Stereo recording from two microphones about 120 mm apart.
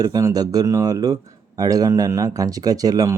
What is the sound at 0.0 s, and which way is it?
Speech, 30° right (ahead or behind).